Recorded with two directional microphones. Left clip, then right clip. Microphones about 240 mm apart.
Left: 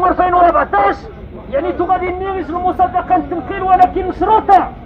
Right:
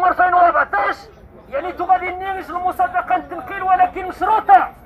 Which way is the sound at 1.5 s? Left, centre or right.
Centre.